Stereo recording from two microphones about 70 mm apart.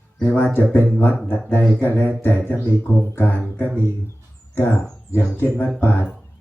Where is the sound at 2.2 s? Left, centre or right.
Left.